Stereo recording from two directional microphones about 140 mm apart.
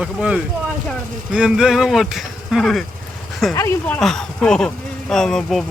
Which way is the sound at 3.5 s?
20° left (ahead or behind).